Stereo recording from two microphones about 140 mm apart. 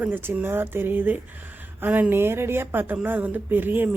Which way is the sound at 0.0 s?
15° right (ahead or behind).